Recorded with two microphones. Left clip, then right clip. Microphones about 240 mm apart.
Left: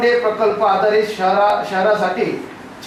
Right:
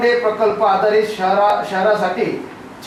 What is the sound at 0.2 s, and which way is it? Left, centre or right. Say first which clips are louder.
Speech: even; centre.